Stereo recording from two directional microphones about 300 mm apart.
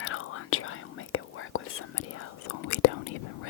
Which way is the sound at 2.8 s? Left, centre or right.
Left.